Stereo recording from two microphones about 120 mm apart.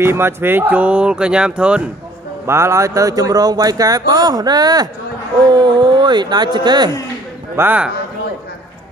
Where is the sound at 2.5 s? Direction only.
25° right (ahead or behind).